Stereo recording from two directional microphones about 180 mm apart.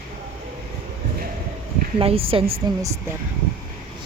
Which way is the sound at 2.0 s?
30° right (ahead or behind).